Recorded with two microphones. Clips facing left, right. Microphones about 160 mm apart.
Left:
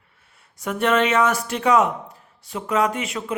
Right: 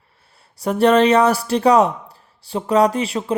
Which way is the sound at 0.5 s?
35° right (ahead or behind).